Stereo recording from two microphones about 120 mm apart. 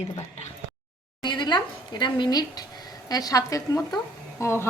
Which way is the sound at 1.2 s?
40° left (ahead or behind).